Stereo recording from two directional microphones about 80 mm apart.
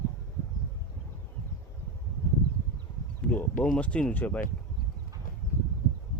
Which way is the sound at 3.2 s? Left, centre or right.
Centre.